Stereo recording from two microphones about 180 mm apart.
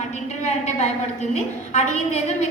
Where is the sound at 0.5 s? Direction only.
40° left (ahead or behind).